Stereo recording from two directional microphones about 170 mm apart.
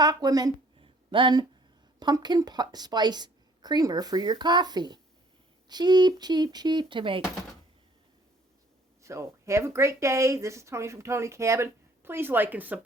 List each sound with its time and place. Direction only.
0.0 s a woman's voice: 25° right (ahead or behind)
9.0 s speech: 15° right (ahead or behind)